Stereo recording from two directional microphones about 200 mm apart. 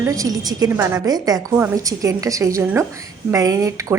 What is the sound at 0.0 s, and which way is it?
A woman's voice, 15° right (ahead or behind).